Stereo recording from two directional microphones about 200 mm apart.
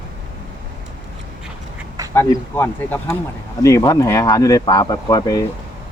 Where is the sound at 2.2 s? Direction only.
10° left (ahead or behind).